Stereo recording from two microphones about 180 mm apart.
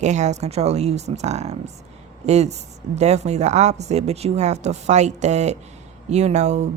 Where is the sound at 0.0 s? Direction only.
40° right (ahead or behind).